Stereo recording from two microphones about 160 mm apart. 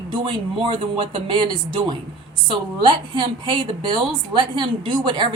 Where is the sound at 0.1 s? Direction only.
30° right (ahead or behind).